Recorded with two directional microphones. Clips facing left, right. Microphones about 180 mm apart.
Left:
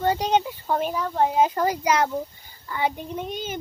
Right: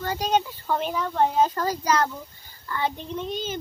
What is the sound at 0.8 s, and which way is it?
A child's voice, 5° left (ahead or behind).